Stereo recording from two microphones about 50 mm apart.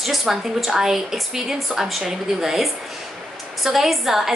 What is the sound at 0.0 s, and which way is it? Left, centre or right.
A woman's voice, centre.